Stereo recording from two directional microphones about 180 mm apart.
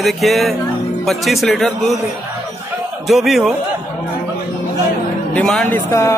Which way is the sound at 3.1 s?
Centre (ahead or behind).